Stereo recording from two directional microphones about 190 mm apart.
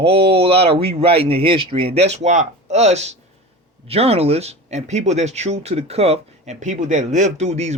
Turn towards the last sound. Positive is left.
turn(degrees=-35)  # may be behind; listen again after turning